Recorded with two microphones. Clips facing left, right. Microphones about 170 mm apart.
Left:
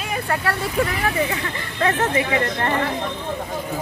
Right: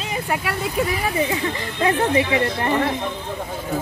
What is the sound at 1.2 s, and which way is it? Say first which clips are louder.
Speech: right 3 dB; 20° right (ahead or behind).